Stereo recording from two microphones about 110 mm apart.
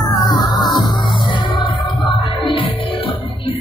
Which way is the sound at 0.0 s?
40° left (ahead or behind).